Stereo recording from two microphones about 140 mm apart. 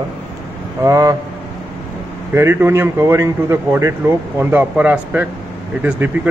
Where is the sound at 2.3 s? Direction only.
15° right (ahead or behind).